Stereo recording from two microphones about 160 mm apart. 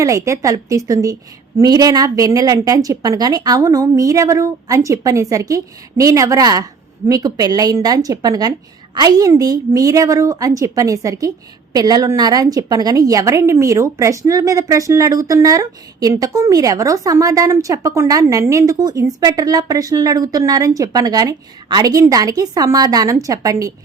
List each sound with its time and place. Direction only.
0.0 s a woman's voice: 20° right (ahead or behind)